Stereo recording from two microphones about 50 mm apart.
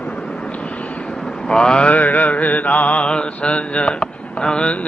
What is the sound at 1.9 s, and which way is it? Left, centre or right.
Mantra, left.